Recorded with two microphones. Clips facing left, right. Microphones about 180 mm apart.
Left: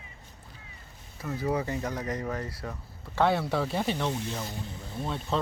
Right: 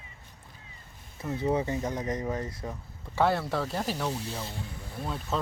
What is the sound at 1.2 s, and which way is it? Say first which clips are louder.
Speech: right 2 dB; 25° right (ahead or behind).